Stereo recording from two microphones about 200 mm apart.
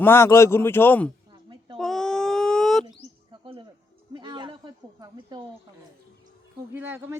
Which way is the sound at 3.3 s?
25° right (ahead or behind).